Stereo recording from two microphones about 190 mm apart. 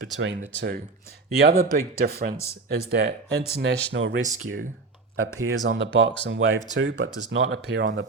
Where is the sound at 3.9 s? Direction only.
70° right (ahead or behind).